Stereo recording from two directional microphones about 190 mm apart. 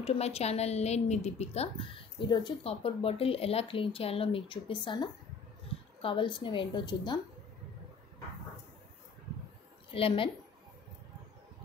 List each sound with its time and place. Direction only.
0.0 s a woman's voice: 35° left (ahead or behind)
9.8 s a woman's voice: 30° left (ahead or behind)